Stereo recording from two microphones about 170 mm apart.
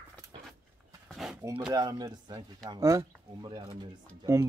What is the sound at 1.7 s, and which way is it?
Speech, 25° right (ahead or behind).